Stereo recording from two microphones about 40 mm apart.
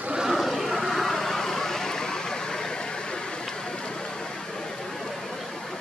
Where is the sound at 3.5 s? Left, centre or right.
Centre.